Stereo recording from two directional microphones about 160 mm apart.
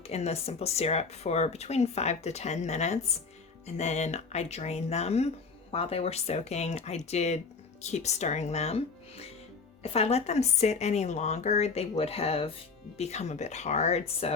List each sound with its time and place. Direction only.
0.1 s speech: 40° left (ahead or behind)